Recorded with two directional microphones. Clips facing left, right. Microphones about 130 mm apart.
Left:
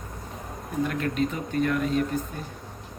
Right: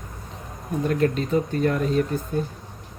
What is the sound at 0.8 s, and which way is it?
Speech, 35° right (ahead or behind).